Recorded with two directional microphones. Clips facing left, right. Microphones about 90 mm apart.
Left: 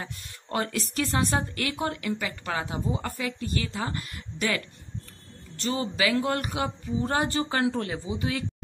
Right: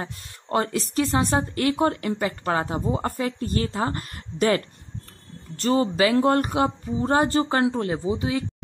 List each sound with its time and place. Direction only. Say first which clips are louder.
0.0 s speech: right 5 dB; 30° right (ahead or behind)